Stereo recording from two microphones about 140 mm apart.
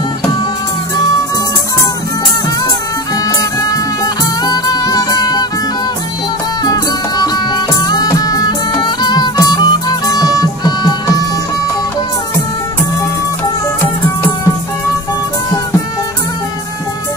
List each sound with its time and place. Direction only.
3.3 s music: 25° left (ahead or behind)
6.6 s music: 30° left (ahead or behind)